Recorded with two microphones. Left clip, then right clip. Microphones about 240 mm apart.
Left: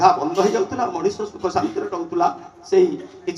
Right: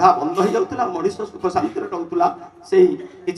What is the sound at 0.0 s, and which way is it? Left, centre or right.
A man's voice, right.